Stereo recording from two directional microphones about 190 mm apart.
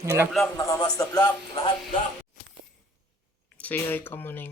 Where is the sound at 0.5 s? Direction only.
20° left (ahead or behind).